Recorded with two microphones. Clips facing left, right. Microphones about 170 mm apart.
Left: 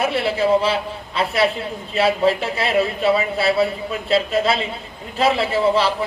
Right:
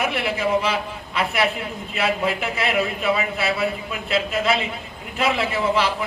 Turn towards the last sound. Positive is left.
turn(degrees=30)  # may be behind; listen again after turning